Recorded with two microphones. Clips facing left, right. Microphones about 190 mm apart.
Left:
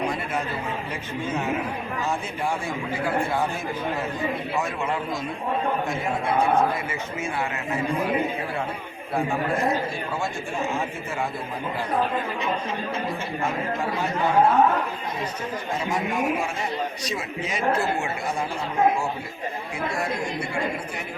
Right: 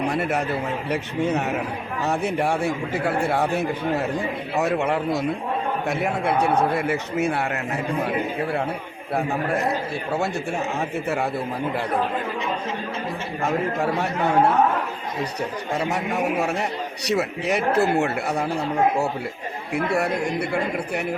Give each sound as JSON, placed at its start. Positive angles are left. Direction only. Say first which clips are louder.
{"t": 0.1, "sound": "a sound", "louder": "right 5 dB", "side_deg": -70}
{"t": 0.9, "sound": "speech", "louder": "right 6 dB", "side_deg": -70}
{"t": 17.1, "sound": "speech", "louder": "right 7 dB", "side_deg": -70}
{"t": 19.7, "sound": "speech", "louder": "right 7 dB", "side_deg": -65}